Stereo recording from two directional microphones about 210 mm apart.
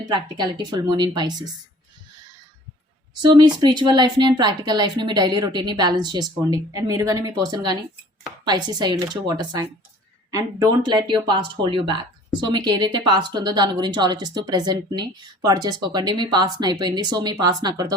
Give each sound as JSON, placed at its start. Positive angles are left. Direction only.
{"t": 0.0, "sound": "speech", "side_deg": -20}
{"t": 3.2, "sound": "speech", "side_deg": -20}